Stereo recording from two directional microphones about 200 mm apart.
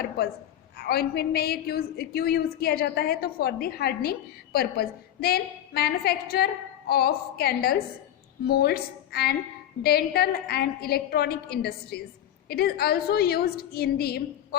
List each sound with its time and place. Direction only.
0.9 s a woman's voice: 50° left (ahead or behind)